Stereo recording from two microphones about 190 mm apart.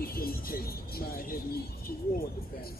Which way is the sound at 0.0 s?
50° left (ahead or behind).